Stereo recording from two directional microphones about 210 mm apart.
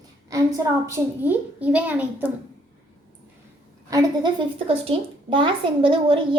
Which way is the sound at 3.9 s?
20° right (ahead or behind).